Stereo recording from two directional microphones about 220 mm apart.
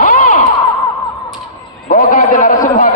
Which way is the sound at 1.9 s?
40° left (ahead or behind).